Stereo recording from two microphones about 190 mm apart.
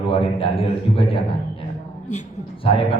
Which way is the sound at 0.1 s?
30° left (ahead or behind).